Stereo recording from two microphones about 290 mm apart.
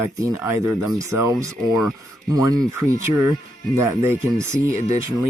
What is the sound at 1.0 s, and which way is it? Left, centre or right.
Speech, centre.